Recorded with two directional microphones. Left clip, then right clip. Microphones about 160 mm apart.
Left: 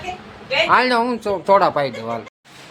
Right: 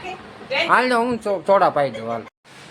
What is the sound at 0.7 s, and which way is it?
Speech, 5° left (ahead or behind).